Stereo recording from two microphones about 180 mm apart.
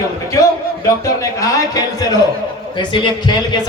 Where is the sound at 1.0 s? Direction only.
20° left (ahead or behind).